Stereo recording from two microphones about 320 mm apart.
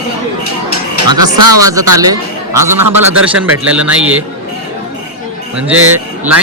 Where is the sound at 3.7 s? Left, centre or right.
Centre.